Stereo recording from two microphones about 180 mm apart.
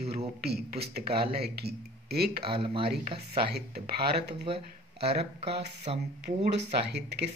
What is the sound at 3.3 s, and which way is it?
Speech, 60° right (ahead or behind).